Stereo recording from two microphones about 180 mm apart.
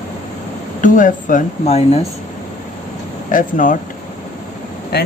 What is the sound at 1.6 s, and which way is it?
Speech, 35° left (ahead or behind).